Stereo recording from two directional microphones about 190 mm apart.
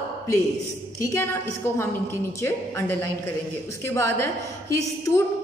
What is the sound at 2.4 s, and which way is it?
A woman's voice, 10° left (ahead or behind).